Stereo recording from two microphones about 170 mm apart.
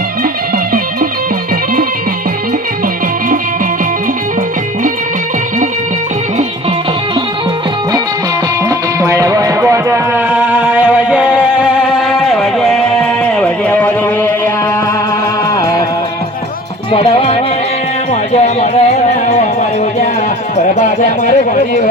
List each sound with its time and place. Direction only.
9.0 s music: 20° right (ahead or behind); by 14.5 s 10° left (ahead or behind)
16.9 s music: 30° left (ahead or behind)
18.1 s music: 45° left (ahead or behind)
20.6 s a sound: 45° left (ahead or behind)